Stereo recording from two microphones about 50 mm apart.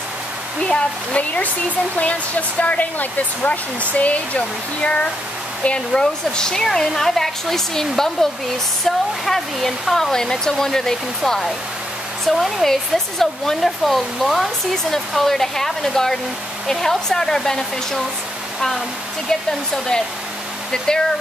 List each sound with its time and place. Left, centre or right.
1.1 s speech: left; by 18.0 s centre
20.7 s speech: centre